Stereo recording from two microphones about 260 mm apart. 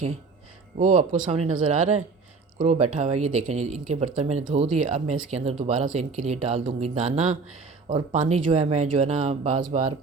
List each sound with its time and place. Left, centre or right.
0.8 s speech: right
2.6 s speech: right